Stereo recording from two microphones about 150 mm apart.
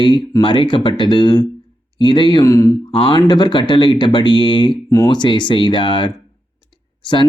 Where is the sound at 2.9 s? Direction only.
35° left (ahead or behind).